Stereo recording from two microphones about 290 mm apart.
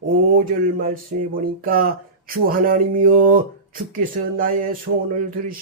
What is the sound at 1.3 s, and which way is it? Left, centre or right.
Speech, right.